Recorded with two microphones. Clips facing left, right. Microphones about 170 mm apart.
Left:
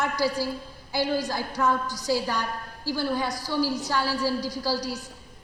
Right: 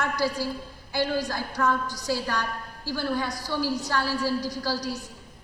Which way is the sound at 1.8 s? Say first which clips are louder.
Left 1 dB; 15° right (ahead or behind).